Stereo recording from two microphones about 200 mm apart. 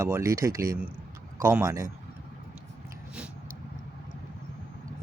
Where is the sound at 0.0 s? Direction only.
15° right (ahead or behind).